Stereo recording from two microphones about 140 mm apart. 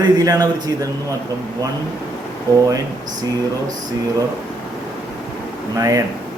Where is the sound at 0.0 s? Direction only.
25° right (ahead or behind).